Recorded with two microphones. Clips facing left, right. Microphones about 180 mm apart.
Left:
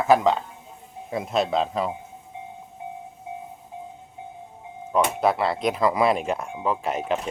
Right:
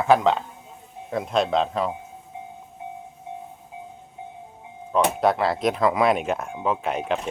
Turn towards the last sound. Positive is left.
turn(degrees=0)  # may be behind; listen again after turning